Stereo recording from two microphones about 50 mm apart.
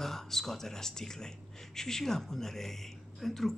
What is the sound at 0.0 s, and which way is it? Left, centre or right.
Speech, centre.